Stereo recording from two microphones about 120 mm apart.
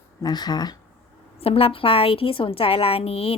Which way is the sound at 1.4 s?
50° left (ahead or behind).